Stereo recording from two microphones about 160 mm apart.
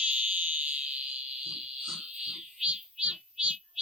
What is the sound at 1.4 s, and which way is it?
Pig, 5° right (ahead or behind).